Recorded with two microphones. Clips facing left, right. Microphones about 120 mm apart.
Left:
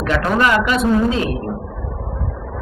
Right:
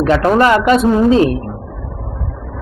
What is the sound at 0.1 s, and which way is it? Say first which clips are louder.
A man's voice: right 4 dB; 30° right (ahead or behind).